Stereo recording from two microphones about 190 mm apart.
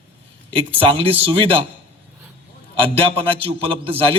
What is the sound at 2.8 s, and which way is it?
A man's voice, 30° right (ahead or behind).